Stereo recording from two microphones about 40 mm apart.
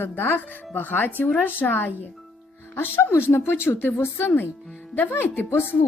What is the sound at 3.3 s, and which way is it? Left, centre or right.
Speech, left.